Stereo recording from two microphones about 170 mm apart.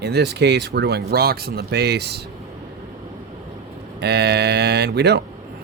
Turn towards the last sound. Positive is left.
turn(degrees=-75)  # may be behind; listen again after turning